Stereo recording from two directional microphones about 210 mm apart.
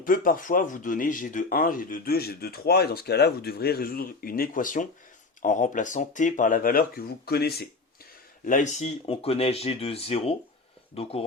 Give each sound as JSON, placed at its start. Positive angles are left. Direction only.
{"t": 0.0, "sound": "speech", "side_deg": 40}
{"t": 8.4, "sound": "speech", "side_deg": 35}